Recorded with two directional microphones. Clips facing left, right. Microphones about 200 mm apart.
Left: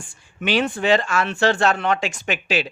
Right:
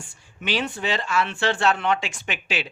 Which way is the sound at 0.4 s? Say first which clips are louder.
Left 6 dB; 50° left (ahead or behind).